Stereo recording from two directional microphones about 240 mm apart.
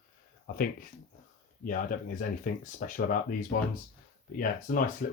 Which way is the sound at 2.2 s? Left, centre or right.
Left.